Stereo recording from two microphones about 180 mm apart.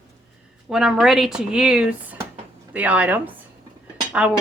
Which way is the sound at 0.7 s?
5° right (ahead or behind).